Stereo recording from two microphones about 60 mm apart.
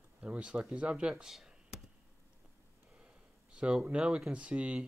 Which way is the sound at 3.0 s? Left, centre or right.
Centre.